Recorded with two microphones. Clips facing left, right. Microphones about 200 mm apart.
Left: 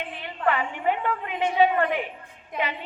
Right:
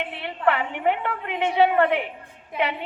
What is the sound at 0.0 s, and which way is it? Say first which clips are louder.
A woman's voice: right 3 dB; 65° right (ahead or behind).